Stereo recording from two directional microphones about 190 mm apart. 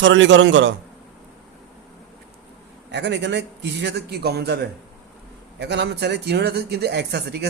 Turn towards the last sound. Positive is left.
turn(degrees=-60)  # may be behind; listen again after turning